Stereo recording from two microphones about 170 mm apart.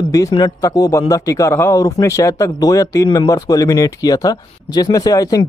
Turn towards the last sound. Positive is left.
turn(degrees=20)  # may be behind; listen again after turning